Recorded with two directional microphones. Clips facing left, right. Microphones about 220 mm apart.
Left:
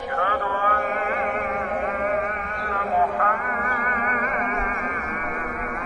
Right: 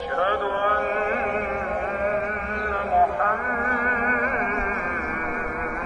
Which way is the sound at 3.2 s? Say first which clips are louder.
Right 1 dB; 30° right (ahead or behind).